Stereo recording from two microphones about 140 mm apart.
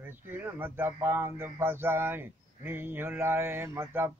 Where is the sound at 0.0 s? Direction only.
15° right (ahead or behind).